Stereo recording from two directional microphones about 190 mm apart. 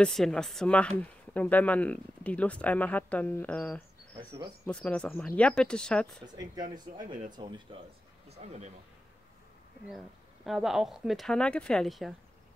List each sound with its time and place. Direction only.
0.0 s speech: 5° left (ahead or behind)
6.3 s speech: 20° right (ahead or behind)
6.9 s speech: 45° right (ahead or behind)
7.3 s speech: 25° right (ahead or behind)
8.4 s a man's voice: 35° right (ahead or behind)
9.8 s speech: centre (ahead or behind)